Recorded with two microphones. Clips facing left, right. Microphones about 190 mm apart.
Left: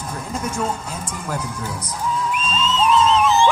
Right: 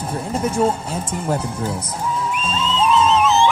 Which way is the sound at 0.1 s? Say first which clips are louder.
Right 5 dB; 30° right (ahead or behind).